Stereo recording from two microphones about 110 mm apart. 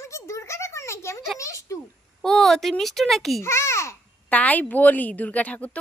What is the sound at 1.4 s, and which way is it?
Speech, 30° left (ahead or behind).